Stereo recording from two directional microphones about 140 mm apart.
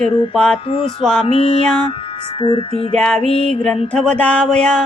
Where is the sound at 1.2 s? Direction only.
45° left (ahead or behind).